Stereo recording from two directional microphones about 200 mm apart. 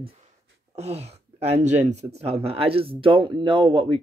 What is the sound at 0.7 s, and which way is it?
Speech, 30° right (ahead or behind).